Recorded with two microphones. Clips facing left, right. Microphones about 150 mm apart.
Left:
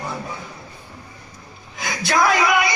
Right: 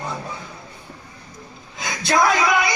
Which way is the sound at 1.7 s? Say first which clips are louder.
Right 1 dB; 25° right (ahead or behind).